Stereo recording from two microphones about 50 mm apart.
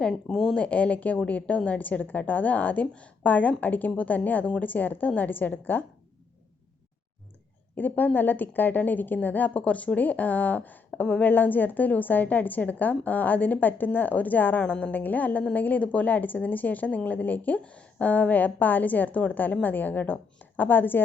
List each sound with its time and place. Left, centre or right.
0.0 s speech: centre
0.5 s a woman's voice: left
7.8 s a woman's voice: left